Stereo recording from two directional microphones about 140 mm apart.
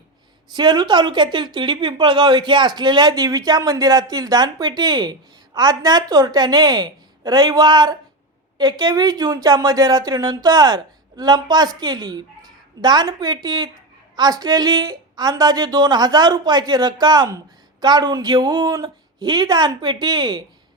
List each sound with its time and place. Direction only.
0.5 s a woman's voice: 30° right (ahead or behind)